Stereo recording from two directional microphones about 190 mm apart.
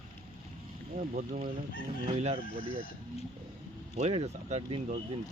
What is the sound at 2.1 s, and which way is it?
Speech, 35° right (ahead or behind).